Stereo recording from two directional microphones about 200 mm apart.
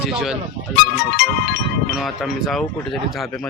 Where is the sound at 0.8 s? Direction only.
55° left (ahead or behind).